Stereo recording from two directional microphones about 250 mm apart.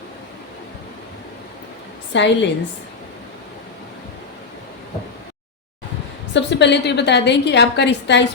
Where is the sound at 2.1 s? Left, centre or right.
Left.